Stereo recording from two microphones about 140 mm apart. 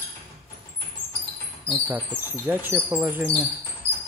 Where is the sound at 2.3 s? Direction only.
15° right (ahead or behind).